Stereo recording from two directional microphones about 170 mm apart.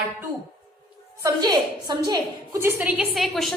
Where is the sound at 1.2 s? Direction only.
20° right (ahead or behind).